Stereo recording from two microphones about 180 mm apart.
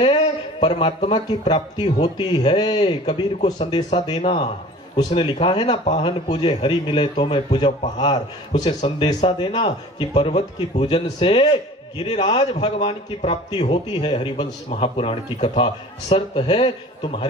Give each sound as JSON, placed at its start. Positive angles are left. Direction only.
{"t": 0.0, "sound": "a man's voice", "side_deg": 30}